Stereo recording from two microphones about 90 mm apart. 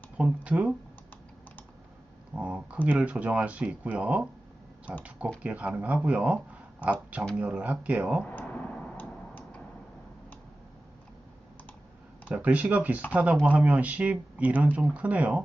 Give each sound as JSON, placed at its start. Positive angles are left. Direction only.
{"t": 0.2, "sound": "speech", "side_deg": -15}
{"t": 2.3, "sound": "speech", "side_deg": -15}
{"t": 5.4, "sound": "speech", "side_deg": -15}
{"t": 8.3, "sound": "a sound", "side_deg": 15}
{"t": 12.3, "sound": "speech", "side_deg": -15}